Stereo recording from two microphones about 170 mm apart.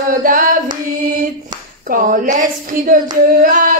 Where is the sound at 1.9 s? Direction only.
55° right (ahead or behind).